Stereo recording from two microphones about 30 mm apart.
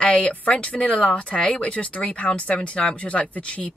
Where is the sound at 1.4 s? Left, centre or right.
Left.